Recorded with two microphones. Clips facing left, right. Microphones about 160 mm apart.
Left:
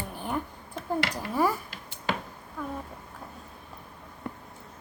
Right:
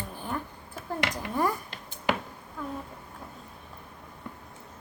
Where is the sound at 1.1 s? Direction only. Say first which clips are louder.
Even; 5° left (ahead or behind).